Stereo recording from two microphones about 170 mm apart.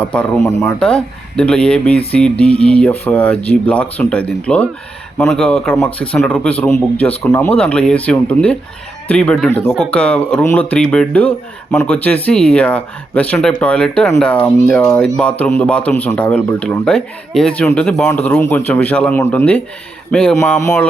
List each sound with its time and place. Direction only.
0.1 s speech: 5° left (ahead or behind)